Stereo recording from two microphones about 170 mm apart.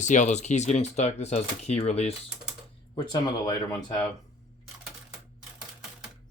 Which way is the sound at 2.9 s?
25° left (ahead or behind).